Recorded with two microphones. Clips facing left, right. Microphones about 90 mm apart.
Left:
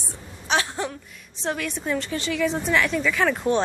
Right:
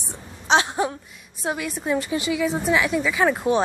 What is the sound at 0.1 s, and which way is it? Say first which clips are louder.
A woman's voice: right 5 dB; 20° right (ahead or behind).